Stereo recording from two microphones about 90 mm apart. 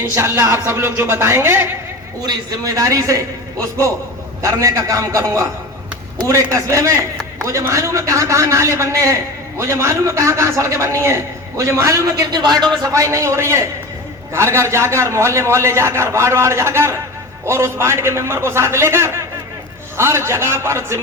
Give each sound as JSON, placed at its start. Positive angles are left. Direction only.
{"t": 0.1, "sound": "a man's voice", "side_deg": -30}
{"t": 2.2, "sound": "a man's voice", "side_deg": -40}
{"t": 4.4, "sound": "a man's voice", "side_deg": -35}
{"t": 12.4, "sound": "speech", "side_deg": -55}
{"t": 12.8, "sound": "a man's voice", "side_deg": -35}